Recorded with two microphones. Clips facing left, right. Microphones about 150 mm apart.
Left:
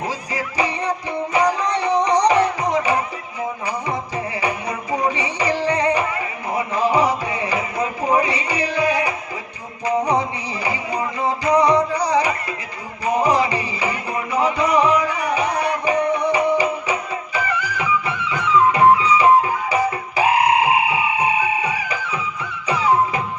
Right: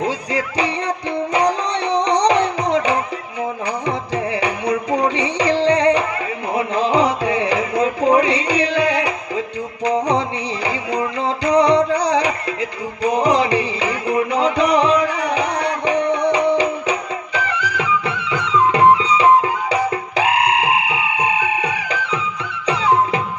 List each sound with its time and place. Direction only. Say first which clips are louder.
0.0 s music: right 5 dB; 70° right (ahead or behind)
2.0 s music: right 1 dB; 70° right (ahead or behind)